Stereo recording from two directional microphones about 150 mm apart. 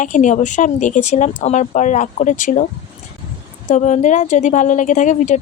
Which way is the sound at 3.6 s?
55° left (ahead or behind).